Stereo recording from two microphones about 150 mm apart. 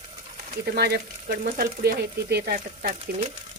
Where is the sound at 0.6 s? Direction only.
90° right; by 2.9 s 70° right (ahead or behind).